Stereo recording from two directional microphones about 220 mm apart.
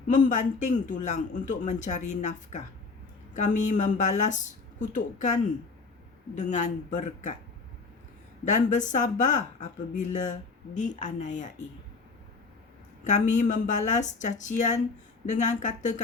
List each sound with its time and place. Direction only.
0.1 s a man's voice: 35° left (ahead or behind)
6.3 s a man's voice: 35° left (ahead or behind)
8.4 s a man's voice: 35° left (ahead or behind)
13.1 s a man's voice: 35° left (ahead or behind)